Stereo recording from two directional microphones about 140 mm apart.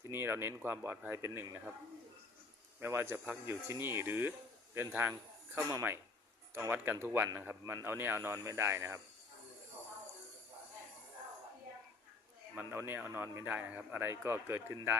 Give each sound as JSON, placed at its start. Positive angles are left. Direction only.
{"t": 0.0, "sound": "speech", "side_deg": -15}
{"t": 2.8, "sound": "speech", "side_deg": -15}
{"t": 12.5, "sound": "speech", "side_deg": -15}